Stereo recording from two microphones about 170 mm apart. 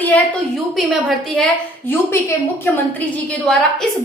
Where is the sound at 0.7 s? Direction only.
Centre (ahead or behind).